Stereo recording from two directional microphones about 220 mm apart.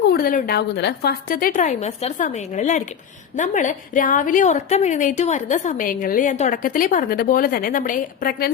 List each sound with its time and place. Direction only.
0.1 s a woman's voice: 40° left (ahead or behind)